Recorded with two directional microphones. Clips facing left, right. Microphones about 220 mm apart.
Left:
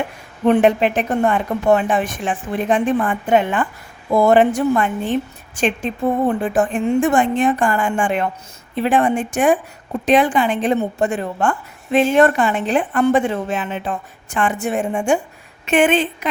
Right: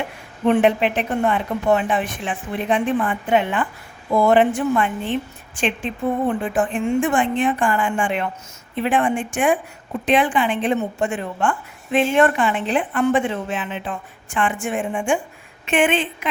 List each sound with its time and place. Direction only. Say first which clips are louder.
0.4 s a woman's voice: left 3 dB; 45° left (ahead or behind)